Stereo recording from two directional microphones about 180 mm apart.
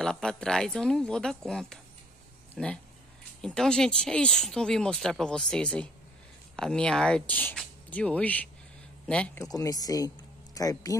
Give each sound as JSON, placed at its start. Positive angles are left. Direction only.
{"t": 0.0, "sound": "a man's voice", "side_deg": 5}
{"t": 9.4, "sound": "speech", "side_deg": 20}